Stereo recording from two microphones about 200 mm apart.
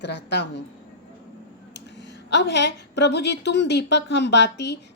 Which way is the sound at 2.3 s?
60° left (ahead or behind).